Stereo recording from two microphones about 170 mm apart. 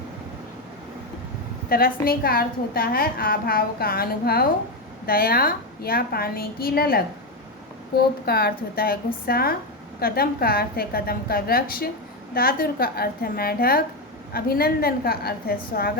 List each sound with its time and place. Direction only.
1.7 s a woman's voice: 60° left (ahead or behind)